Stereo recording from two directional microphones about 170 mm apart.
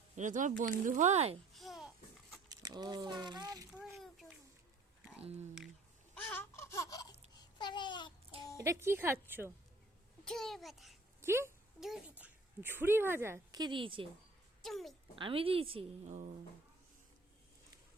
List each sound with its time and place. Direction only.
0.2 s speech: 50° right (ahead or behind)
1.5 s babbling: centre (ahead or behind)
2.5 s speech: 20° right (ahead or behind)
3.9 s a sound: centre (ahead or behind)
5.2 s a woman's voice: 40° right (ahead or behind)
6.1 s a sound: 10° left (ahead or behind)
7.6 s babbling: 25° left (ahead or behind)
8.5 s speech: 15° right (ahead or behind)
10.2 s a child's voice: centre (ahead or behind)
11.2 s speech: 15° right (ahead or behind)
11.8 s a child's voice: centre (ahead or behind); by 14.1 s 30° right (ahead or behind)
14.6 s a woman's voice: centre (ahead or behind)
15.1 s a woman's voice: 30° right (ahead or behind)
16.0 s speech: 45° right (ahead or behind)